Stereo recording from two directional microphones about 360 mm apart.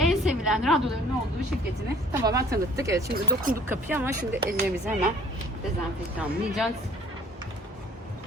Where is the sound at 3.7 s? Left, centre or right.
Centre.